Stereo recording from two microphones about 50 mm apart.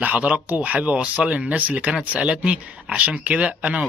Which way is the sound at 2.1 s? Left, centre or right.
Right.